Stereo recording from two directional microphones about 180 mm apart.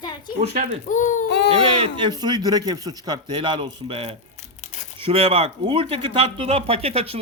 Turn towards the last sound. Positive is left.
turn(degrees=-35)  # may be behind; listen again after turning